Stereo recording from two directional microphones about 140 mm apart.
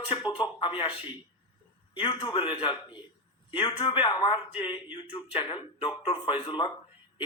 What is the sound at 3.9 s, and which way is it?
A man's voice, 35° left (ahead or behind).